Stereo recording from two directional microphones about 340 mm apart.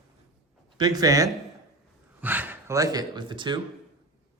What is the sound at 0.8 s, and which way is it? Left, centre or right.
Speech, centre.